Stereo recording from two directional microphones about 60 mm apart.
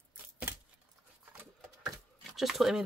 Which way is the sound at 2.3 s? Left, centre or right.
Centre.